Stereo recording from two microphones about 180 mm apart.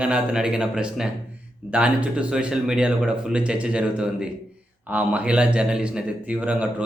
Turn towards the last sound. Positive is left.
turn(degrees=-5)  # may be behind; listen again after turning